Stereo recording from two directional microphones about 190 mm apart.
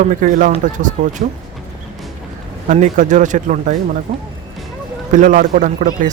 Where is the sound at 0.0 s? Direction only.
40° right (ahead or behind).